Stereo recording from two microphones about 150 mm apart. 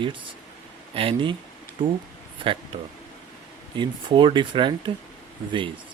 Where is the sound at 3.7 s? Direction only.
30° right (ahead or behind).